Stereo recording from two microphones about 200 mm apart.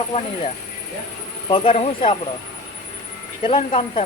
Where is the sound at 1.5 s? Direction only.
25° left (ahead or behind).